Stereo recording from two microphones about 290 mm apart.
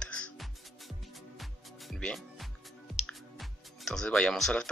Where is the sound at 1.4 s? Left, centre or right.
Centre.